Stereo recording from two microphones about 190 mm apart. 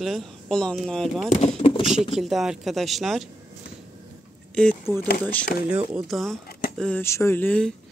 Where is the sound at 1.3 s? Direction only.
40° left (ahead or behind).